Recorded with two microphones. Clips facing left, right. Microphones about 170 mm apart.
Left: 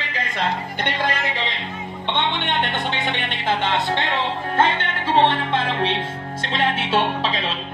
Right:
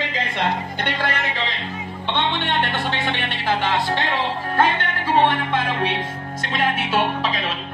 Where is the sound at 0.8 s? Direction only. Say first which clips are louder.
Left 2 dB; 15° left (ahead or behind).